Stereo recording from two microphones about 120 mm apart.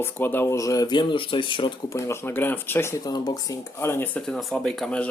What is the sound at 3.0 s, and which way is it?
Speech, 30° left (ahead or behind).